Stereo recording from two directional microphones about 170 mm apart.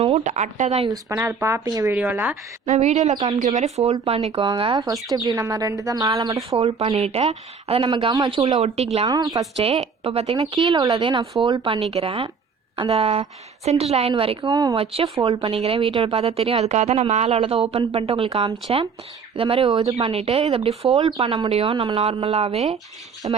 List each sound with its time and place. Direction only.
0.0 s speech: 40° right (ahead or behind)
1.0 s speech: 15° right (ahead or behind)
2.6 s speech: 40° right (ahead or behind); by 6.6 s 20° right (ahead or behind)
6.6 s speech: 35° right (ahead or behind)
8.6 s speech: 35° right (ahead or behind)
9.0 s speech: 20° right (ahead or behind)
9.6 s speech: 35° right (ahead or behind)